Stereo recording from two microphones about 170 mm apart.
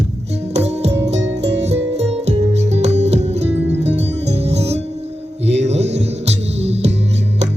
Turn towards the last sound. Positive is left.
turn(degrees=-40)  # may be behind; listen again after turning